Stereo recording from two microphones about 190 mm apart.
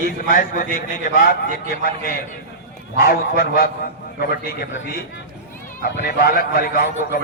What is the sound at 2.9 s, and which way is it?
A man's voice, 50° left (ahead or behind).